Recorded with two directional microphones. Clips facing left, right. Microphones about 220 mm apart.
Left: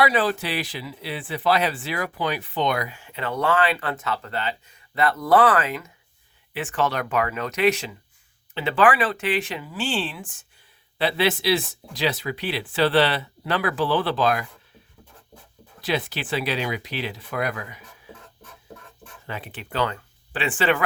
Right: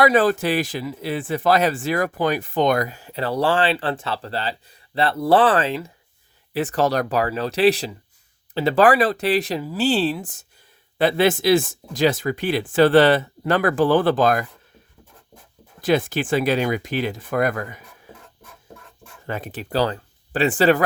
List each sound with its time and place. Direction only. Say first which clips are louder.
0.0 s a man's voice: right 5 dB; 45° right (ahead or behind)
15.8 s a man's voice: right 7 dB; 50° right (ahead or behind)
19.3 s speech: right 7 dB; 40° right (ahead or behind)